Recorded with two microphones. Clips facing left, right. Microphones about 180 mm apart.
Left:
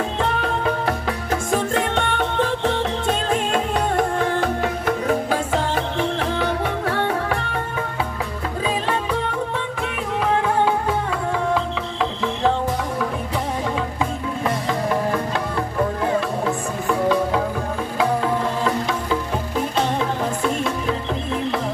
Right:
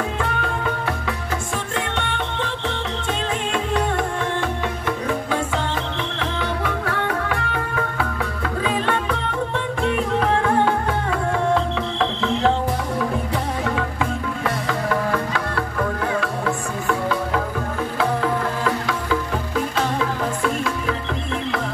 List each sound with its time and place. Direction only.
0.2 s music: 35° left (ahead or behind)
10.2 s music: 10° left (ahead or behind)
14.4 s music: 20° left (ahead or behind)
18.6 s music: 25° left (ahead or behind)